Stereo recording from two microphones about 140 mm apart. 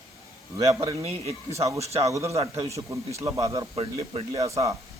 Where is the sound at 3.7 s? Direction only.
40° right (ahead or behind).